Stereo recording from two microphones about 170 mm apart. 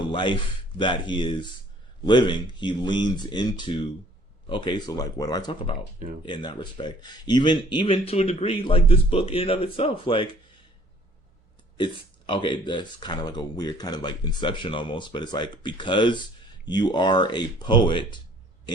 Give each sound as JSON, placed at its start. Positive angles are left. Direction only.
{"t": 0.0, "sound": "speech", "side_deg": 30}
{"t": 11.8, "sound": "speech", "side_deg": 30}